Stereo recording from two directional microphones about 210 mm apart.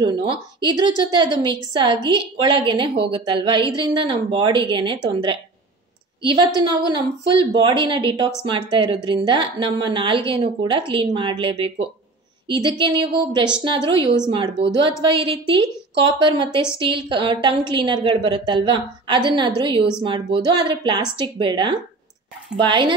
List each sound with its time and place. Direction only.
0.0 s speech: 20° right (ahead or behind)